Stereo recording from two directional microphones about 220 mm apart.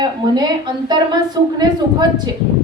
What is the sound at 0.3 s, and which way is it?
A woman's voice, 20° right (ahead or behind).